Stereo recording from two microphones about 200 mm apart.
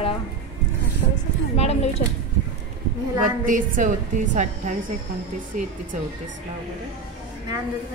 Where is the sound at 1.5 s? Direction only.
30° left (ahead or behind).